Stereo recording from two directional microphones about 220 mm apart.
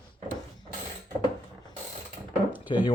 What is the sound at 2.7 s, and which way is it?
Mantra, 20° left (ahead or behind).